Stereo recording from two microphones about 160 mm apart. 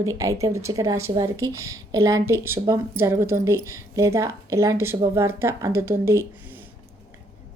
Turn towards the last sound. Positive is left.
turn(degrees=-15)  # may be behind; listen again after turning